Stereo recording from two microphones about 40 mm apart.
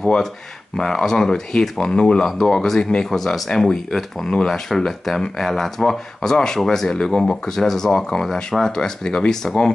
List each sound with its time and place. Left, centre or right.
0.7 s speech: centre
3.1 s speech: centre